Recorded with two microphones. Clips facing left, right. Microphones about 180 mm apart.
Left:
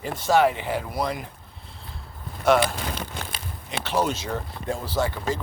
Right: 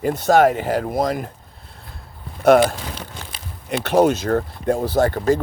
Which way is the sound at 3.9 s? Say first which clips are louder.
Right 9 dB; 55° right (ahead or behind).